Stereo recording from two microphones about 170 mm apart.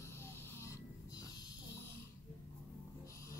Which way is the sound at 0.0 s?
15° left (ahead or behind).